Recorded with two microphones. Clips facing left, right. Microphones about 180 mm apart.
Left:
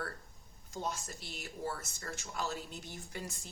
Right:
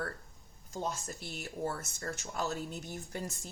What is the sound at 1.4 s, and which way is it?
Speech, 50° right (ahead or behind).